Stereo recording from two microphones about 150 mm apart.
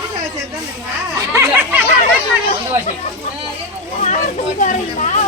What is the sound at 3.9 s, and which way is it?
Speech, 55° left (ahead or behind).